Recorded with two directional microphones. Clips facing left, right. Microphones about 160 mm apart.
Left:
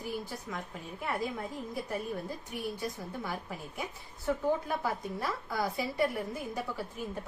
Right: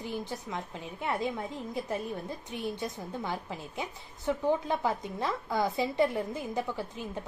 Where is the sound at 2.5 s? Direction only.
25° right (ahead or behind).